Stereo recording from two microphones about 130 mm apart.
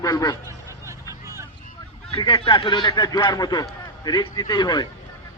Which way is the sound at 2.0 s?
45° left (ahead or behind).